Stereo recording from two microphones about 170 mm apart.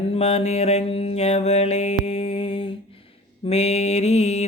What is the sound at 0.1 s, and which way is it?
Mantra, 40° left (ahead or behind).